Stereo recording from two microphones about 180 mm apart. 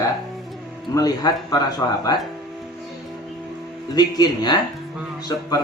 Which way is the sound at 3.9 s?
20° left (ahead or behind).